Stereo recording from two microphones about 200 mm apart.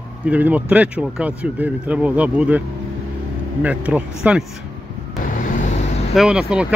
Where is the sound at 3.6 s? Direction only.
5° right (ahead or behind).